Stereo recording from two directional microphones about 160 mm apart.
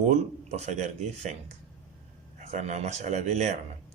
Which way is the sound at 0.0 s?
45° right (ahead or behind).